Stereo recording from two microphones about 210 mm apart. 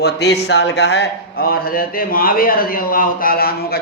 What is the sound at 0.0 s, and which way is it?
A man's voice, 50° left (ahead or behind).